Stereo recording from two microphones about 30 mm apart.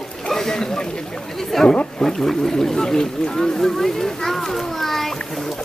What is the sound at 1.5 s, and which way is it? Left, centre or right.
Speech, centre.